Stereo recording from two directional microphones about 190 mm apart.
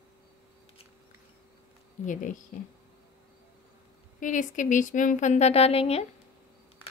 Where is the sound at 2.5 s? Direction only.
45° left (ahead or behind).